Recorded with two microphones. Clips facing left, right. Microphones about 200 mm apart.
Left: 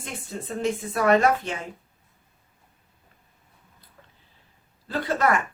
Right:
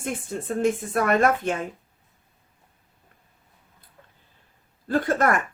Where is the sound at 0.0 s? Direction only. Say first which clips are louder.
Right 5 dB; 50° right (ahead or behind).